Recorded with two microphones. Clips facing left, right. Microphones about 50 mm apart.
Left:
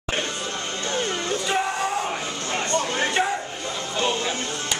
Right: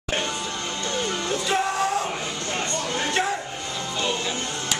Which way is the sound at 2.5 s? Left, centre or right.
Left.